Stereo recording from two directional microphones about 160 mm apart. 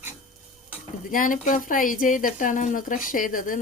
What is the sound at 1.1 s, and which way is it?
Speech, 55° left (ahead or behind).